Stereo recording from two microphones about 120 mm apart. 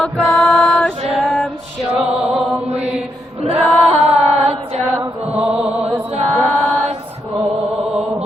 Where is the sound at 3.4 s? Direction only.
55° right (ahead or behind).